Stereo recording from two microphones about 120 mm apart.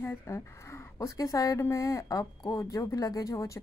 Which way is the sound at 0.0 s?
20° left (ahead or behind).